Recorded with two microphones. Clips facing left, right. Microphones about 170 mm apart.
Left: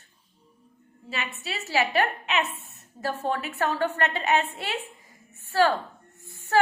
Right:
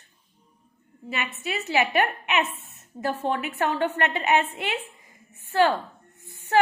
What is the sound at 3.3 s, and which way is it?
A woman's voice, 20° right (ahead or behind).